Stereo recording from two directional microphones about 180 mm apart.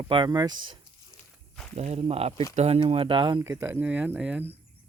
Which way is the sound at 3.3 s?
15° right (ahead or behind).